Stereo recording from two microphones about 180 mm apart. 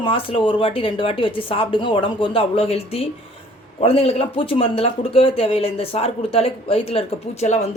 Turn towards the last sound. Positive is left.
turn(degrees=35)  # may be behind; listen again after turning